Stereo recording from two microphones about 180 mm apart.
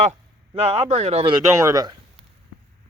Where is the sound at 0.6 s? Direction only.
35° right (ahead or behind).